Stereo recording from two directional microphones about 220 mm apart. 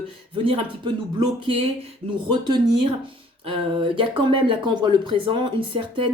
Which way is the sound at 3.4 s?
25° right (ahead or behind).